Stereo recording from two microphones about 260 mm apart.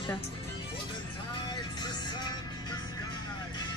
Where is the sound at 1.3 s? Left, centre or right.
Centre.